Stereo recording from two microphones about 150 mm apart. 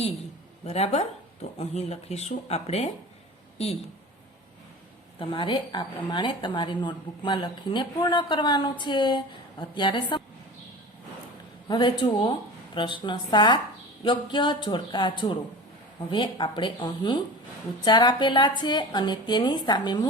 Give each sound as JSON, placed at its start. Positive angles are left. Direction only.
{"t": 0.6, "sound": "speech", "side_deg": 45}
{"t": 5.2, "sound": "a woman's voice", "side_deg": 35}
{"t": 12.1, "sound": "a woman's voice", "side_deg": 35}